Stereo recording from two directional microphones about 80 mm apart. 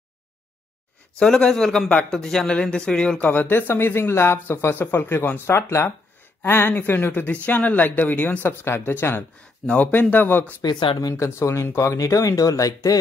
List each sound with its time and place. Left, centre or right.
1.2 s a man's voice: centre
3.3 s speech: left
10.6 s speech: left
11.0 s speech: left
11.2 s speech: left